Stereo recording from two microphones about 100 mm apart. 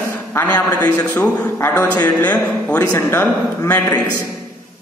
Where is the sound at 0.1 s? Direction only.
25° left (ahead or behind).